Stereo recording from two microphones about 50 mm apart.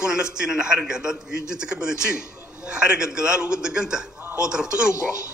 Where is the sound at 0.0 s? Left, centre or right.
Centre.